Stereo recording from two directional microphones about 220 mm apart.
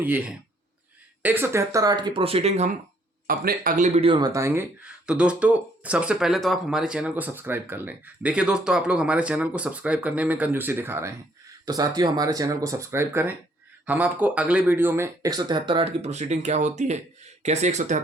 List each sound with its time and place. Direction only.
0.0 s speech: 5° right (ahead or behind); by 2.7 s 30° right (ahead or behind)
3.2 s speech: 40° right (ahead or behind)